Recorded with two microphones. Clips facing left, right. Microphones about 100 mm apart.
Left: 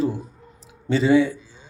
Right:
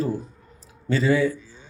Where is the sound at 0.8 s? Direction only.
20° left (ahead or behind).